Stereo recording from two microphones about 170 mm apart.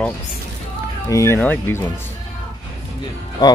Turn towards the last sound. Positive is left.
turn(degrees=25)  # may be behind; listen again after turning